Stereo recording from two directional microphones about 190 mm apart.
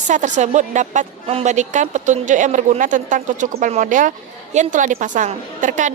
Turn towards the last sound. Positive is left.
turn(degrees=-40)  # may be behind; listen again after turning